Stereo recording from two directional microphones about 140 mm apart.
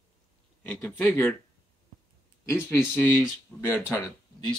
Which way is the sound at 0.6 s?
15° left (ahead or behind).